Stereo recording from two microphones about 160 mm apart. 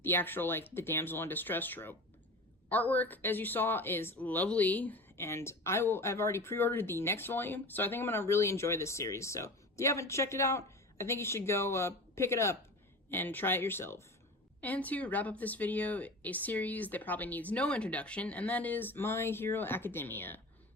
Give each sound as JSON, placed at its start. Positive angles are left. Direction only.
{"t": 0.0, "sound": "speech", "side_deg": 15}